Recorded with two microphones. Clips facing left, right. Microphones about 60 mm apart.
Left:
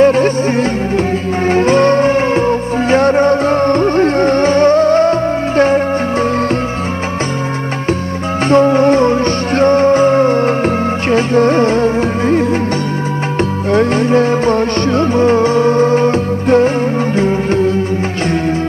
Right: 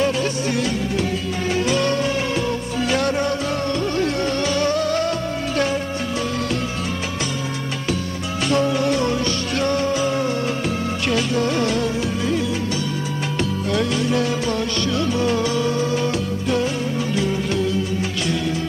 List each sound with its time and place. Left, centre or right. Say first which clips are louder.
0.0 s music: left 11 dB; left
8.5 s music: left 10 dB; left
13.7 s music: left 10 dB; left